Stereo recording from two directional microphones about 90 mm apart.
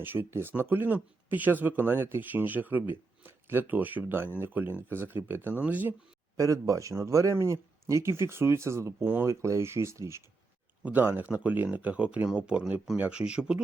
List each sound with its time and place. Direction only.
0.0 s speech: 25° right (ahead or behind)
6.3 s speech: 40° right (ahead or behind)
10.8 s speech: 20° right (ahead or behind)